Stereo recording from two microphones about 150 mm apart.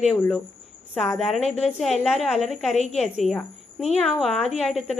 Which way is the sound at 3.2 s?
Centre (ahead or behind).